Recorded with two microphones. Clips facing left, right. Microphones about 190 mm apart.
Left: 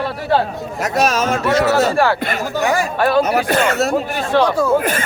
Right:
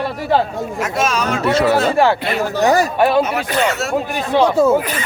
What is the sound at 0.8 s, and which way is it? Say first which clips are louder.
Speech: left 3 dB; 40° left (ahead or behind).